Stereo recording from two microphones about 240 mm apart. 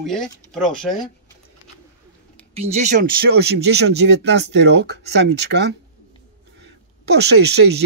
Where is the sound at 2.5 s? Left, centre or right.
Right.